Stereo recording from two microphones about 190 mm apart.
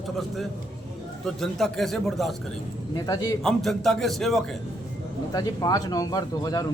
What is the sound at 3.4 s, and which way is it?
Speech, centre (ahead or behind).